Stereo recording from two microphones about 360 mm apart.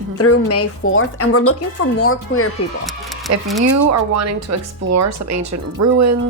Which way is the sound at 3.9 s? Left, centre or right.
Right.